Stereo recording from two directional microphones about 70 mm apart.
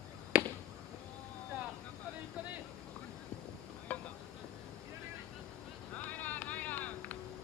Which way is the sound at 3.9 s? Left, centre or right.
Centre.